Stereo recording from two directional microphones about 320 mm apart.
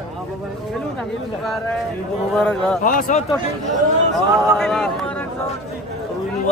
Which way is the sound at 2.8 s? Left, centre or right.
Left.